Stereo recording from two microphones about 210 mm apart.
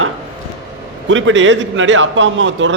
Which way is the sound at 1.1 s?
65° right (ahead or behind).